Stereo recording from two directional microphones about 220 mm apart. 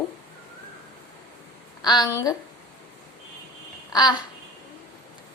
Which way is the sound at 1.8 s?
15° left (ahead or behind).